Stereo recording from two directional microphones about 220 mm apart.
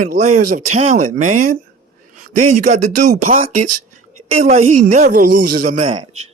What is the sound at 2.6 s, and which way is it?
Speech, 35° right (ahead or behind).